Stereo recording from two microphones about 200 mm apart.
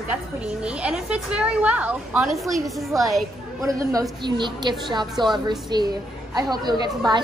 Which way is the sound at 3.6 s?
15° right (ahead or behind).